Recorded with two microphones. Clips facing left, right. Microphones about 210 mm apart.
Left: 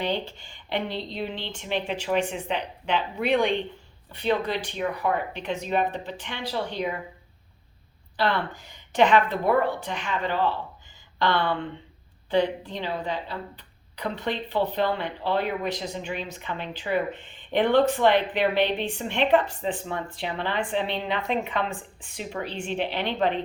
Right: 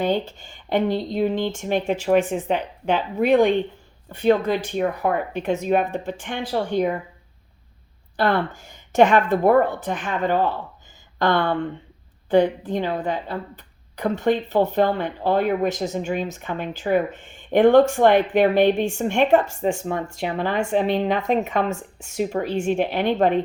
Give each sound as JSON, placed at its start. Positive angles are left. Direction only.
{"t": 0.0, "sound": "a woman's voice", "side_deg": -45}
{"t": 8.1, "sound": "a woman's voice", "side_deg": -45}